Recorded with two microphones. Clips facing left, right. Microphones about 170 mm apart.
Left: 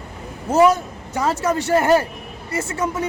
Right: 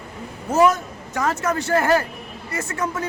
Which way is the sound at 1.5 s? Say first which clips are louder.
Left 3 dB; 20° left (ahead or behind).